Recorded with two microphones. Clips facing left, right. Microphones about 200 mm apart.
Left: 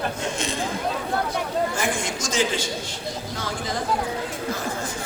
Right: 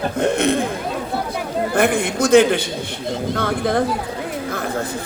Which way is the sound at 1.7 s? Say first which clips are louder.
Right 9 dB; 60° right (ahead or behind).